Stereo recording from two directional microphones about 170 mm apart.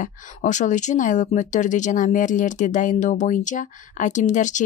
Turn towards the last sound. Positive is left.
turn(degrees=45)  # may be behind; listen again after turning